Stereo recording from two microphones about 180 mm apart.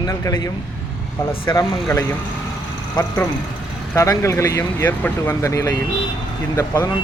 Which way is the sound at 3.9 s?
15° left (ahead or behind).